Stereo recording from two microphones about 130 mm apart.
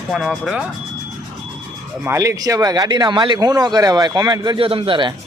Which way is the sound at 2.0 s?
20° right (ahead or behind).